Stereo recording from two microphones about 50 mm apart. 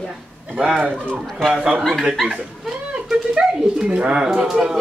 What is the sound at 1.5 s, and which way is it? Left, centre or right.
Speech, centre.